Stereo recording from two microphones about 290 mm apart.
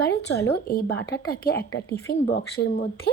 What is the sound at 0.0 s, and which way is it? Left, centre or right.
A woman's voice, left.